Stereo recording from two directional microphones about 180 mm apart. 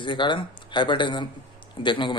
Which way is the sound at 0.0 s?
25° left (ahead or behind).